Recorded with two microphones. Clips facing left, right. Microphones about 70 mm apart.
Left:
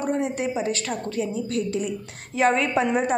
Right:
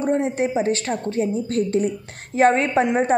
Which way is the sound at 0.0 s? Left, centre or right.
Right.